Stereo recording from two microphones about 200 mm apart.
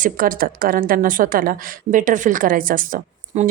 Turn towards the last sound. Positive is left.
turn(degrees=-35)  # may be behind; listen again after turning